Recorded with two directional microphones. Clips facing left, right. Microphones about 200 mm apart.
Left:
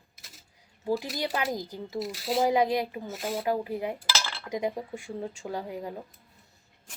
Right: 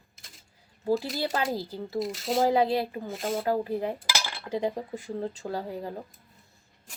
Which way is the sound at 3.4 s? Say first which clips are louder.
Right 1 dB; 15° left (ahead or behind).